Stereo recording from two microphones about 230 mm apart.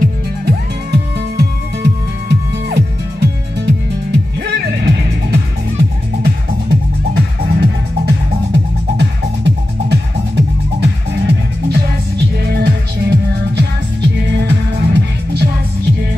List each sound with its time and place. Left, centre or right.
0.0 s music: right
4.8 s music: right